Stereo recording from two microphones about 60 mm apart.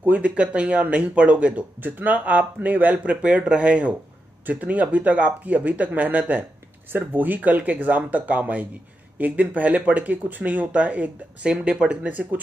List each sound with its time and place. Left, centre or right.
0.0 s speech: right